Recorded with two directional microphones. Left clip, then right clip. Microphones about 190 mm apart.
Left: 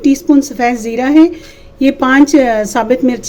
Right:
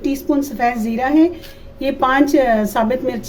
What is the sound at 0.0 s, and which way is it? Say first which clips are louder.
Speech: left 8 dB; 40° left (ahead or behind).